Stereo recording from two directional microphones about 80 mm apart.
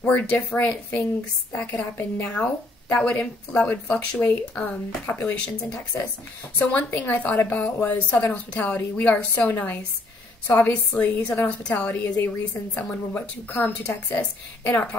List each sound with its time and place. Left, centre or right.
0.0 s a woman's voice: centre